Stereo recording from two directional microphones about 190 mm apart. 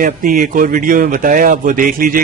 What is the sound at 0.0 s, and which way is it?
Speech, 45° right (ahead or behind).